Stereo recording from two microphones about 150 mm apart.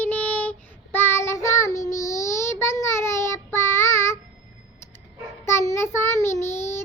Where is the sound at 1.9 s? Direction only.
55° left (ahead or behind).